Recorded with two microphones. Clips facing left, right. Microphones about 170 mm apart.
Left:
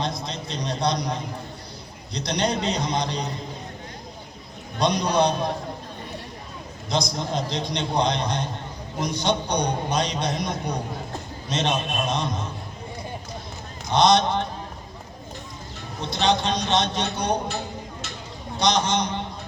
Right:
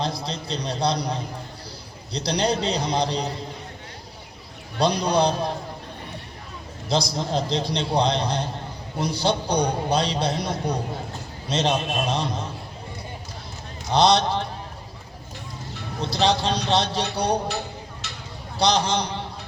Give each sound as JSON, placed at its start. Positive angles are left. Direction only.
{"t": 0.0, "sound": "a man's voice", "side_deg": -30}
{"t": 4.8, "sound": "a man's voice", "side_deg": -30}
{"t": 6.9, "sound": "a man's voice", "side_deg": -30}
{"t": 13.9, "sound": "a man's voice", "side_deg": -30}
{"t": 16.1, "sound": "a man's voice", "side_deg": -35}
{"t": 18.5, "sound": "a man's voice", "side_deg": -30}